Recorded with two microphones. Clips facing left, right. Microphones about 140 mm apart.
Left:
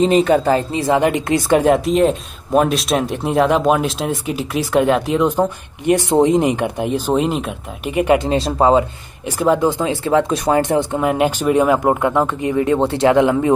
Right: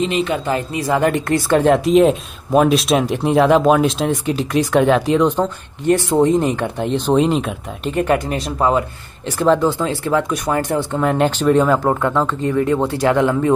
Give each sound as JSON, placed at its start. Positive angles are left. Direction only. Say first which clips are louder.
{"t": 0.0, "sound": "speech", "louder": "left 6 dB", "side_deg": 40}
{"t": 1.7, "sound": "speech", "louder": "right 5 dB", "side_deg": 0}
{"t": 5.3, "sound": "speech", "louder": "left 2 dB", "side_deg": 15}
{"t": 7.9, "sound": "speech", "louder": "left 3 dB", "side_deg": 15}
{"t": 9.2, "sound": "speech", "louder": "even", "side_deg": 10}